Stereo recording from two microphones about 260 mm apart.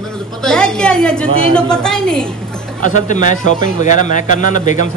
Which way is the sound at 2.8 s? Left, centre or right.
Left.